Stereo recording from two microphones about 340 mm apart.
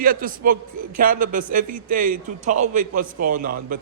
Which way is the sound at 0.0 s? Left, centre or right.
Right.